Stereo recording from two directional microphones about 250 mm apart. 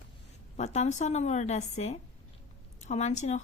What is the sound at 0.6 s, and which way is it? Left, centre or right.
A woman's voice, left.